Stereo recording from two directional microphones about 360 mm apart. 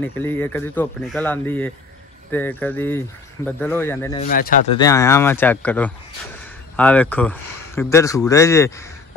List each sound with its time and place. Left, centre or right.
0.0 s speech: centre
4.2 s speech: left
4.7 s speech: centre